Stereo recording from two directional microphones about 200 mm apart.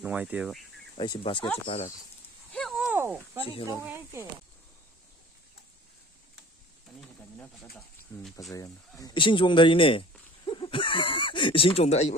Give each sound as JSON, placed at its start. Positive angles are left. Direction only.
{"t": 0.0, "sound": "speech", "side_deg": -5}
{"t": 0.9, "sound": "speech", "side_deg": 25}
{"t": 2.5, "sound": "a sound", "side_deg": 0}
{"t": 3.7, "sound": "speech", "side_deg": -15}
{"t": 7.0, "sound": "pigeon", "side_deg": 5}
{"t": 8.4, "sound": "speech", "side_deg": 15}